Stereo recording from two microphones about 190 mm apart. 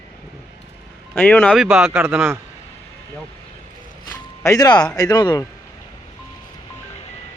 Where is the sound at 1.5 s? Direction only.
5° right (ahead or behind).